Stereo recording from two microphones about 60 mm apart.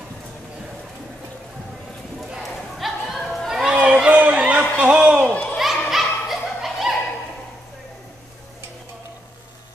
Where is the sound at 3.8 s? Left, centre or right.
Centre.